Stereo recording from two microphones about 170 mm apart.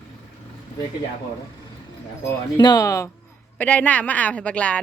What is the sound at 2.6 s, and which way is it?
A woman's voice, 20° left (ahead or behind).